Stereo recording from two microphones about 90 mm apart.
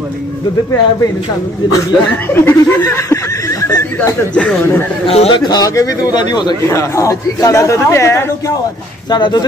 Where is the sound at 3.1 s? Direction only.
40° left (ahead or behind).